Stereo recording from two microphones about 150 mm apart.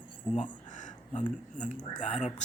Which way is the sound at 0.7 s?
55° left (ahead or behind).